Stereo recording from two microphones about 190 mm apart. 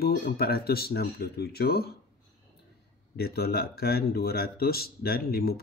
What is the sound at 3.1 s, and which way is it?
Speech, 55° left (ahead or behind).